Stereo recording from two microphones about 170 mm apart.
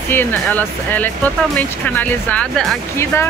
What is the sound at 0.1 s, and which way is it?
Speech, 10° left (ahead or behind).